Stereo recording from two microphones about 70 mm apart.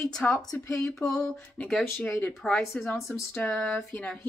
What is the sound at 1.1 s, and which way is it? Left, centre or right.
Speech, centre.